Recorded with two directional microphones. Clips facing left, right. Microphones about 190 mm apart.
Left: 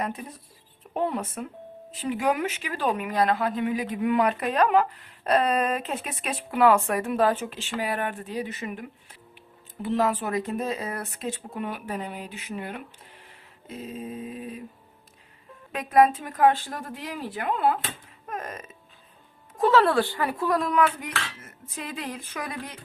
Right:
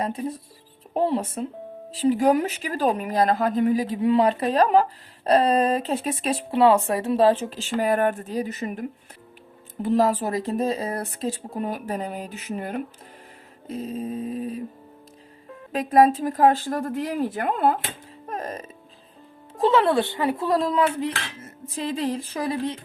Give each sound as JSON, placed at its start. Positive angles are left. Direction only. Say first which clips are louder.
{"t": 0.0, "sound": "speech", "louder": "right 5 dB", "side_deg": -30}
{"t": 15.7, "sound": "speech", "louder": "right 3 dB", "side_deg": -35}
{"t": 18.3, "sound": "music", "louder": "right 4 dB", "side_deg": -35}
{"t": 19.5, "sound": "dishes", "louder": "right 1 dB", "side_deg": -25}